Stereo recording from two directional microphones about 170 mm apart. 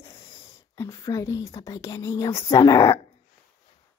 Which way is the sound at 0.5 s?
20° left (ahead or behind).